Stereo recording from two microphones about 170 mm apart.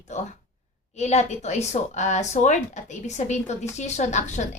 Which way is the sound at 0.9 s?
40° left (ahead or behind).